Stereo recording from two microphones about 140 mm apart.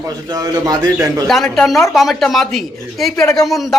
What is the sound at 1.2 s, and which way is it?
A man's voice, 5° left (ahead or behind).